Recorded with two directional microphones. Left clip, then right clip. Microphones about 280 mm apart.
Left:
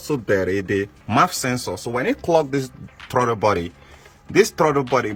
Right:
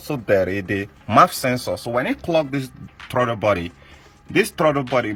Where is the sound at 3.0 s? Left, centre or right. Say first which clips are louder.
Left 3 dB; centre.